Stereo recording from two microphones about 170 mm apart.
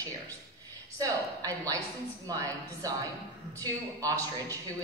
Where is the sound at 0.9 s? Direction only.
20° right (ahead or behind).